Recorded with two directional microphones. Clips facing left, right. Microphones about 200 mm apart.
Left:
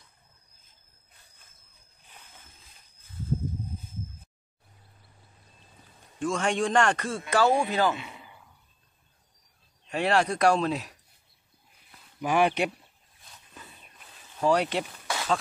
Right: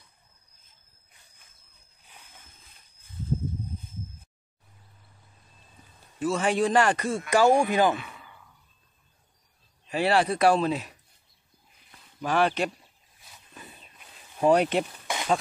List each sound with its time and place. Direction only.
6.1 s a man's voice: 5° right (ahead or behind)
8.0 s a sound: 15° left (ahead or behind)
9.8 s speech: 5° right (ahead or behind)
12.2 s speech: 15° left (ahead or behind)
13.2 s wild animals: 5° right (ahead or behind)
14.4 s speech: 20° right (ahead or behind)